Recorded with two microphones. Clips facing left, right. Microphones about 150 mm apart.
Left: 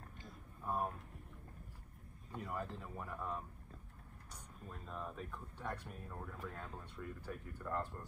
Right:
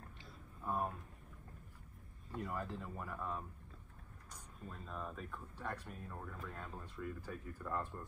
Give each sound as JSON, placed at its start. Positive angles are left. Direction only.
{"t": 0.7, "sound": "a sound", "side_deg": 5}
{"t": 2.3, "sound": "speech", "side_deg": 0}
{"t": 4.6, "sound": "speech", "side_deg": 5}